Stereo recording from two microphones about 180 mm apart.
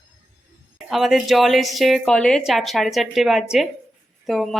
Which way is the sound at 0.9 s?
Centre (ahead or behind).